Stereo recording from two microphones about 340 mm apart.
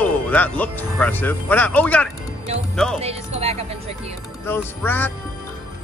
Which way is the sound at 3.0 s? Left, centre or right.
Centre.